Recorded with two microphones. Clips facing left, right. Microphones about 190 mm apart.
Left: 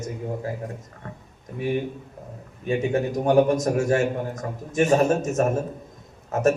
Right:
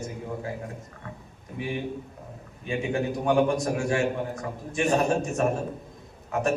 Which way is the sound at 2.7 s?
40° left (ahead or behind).